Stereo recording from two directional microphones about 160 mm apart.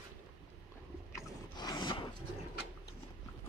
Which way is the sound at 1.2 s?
25° left (ahead or behind).